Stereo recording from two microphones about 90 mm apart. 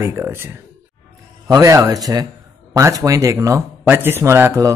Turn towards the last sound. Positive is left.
turn(degrees=-30)  # may be behind; listen again after turning